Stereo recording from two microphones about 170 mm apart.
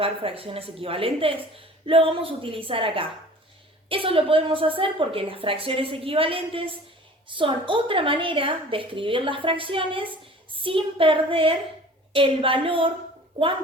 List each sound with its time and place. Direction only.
0.0 s a woman's voice: 35° right (ahead or behind)